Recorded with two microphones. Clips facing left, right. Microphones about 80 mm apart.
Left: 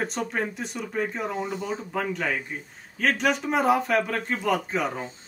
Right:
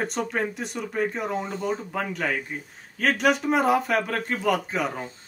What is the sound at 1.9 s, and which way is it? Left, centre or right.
Speech, centre.